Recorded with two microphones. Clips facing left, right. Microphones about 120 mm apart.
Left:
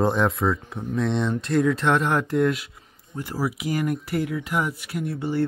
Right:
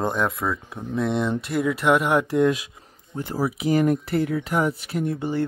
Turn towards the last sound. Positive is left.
turn(degrees=-20)  # may be behind; listen again after turning